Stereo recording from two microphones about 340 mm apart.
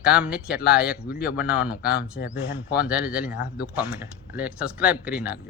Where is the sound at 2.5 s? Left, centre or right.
Centre.